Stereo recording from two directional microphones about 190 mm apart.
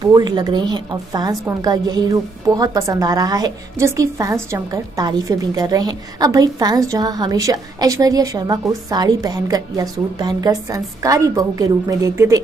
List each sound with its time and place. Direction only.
0.0 s a woman's voice: 20° right (ahead or behind)